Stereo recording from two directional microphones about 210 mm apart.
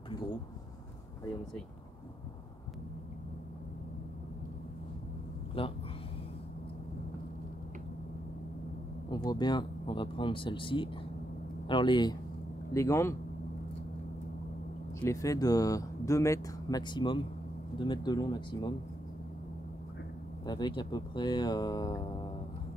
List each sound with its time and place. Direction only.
5.6 s speech: 25° left (ahead or behind)
9.1 s speech: 20° left (ahead or behind)
15.0 s speech: 15° left (ahead or behind)
20.4 s speech: 20° left (ahead or behind)